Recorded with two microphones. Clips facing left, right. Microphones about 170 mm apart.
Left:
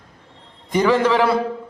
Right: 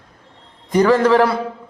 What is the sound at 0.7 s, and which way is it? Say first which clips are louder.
Speech: right 3 dB; 10° left (ahead or behind).